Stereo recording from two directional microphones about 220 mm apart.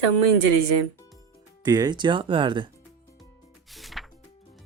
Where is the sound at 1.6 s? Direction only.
15° right (ahead or behind).